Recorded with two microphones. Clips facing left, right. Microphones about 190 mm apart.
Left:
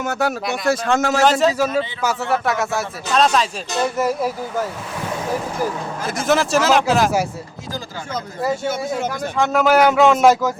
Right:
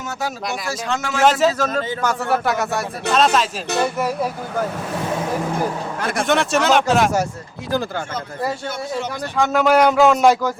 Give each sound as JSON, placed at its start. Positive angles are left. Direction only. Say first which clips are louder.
{"t": 0.0, "sound": "speech", "louder": "left 6 dB", "side_deg": 60}
{"t": 0.7, "sound": "speech", "louder": "left 9 dB", "side_deg": 50}
{"t": 1.2, "sound": "a man's voice", "louder": "right 3 dB", "side_deg": 0}
{"t": 6.2, "sound": "a man's voice", "louder": "left 2 dB", "side_deg": 0}
{"t": 9.4, "sound": "a man's voice", "louder": "even", "side_deg": 0}